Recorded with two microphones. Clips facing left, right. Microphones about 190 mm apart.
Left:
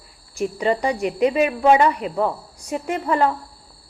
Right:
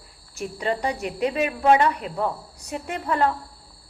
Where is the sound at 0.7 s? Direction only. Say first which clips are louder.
Left 3 dB; 10° left (ahead or behind).